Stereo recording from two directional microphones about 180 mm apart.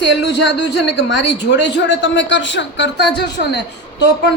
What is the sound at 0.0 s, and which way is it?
A woman's voice, 75° left (ahead or behind).